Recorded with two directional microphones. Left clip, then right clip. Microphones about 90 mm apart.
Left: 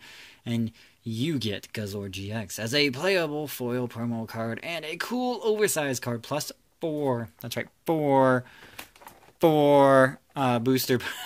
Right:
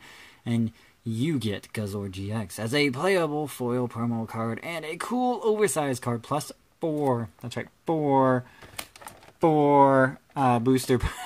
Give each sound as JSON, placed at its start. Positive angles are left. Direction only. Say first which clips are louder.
{"t": 1.1, "sound": "speech", "louder": "right 1 dB", "side_deg": -30}
{"t": 1.5, "sound": "speech", "louder": "right 1 dB", "side_deg": -20}
{"t": 2.4, "sound": "speech", "louder": "even", "side_deg": -30}
{"t": 4.0, "sound": "speech", "louder": "right 2 dB", "side_deg": -5}
{"t": 4.4, "sound": "speech", "louder": "left 2 dB", "side_deg": -20}
{"t": 7.2, "sound": "speech", "louder": "left 1 dB", "side_deg": -15}
{"t": 7.8, "sound": "speech", "louder": "left 1 dB", "side_deg": 5}
{"t": 9.4, "sound": "speech", "louder": "even", "side_deg": 5}
{"t": 10.6, "sound": "speech", "louder": "right 1 dB", "side_deg": -30}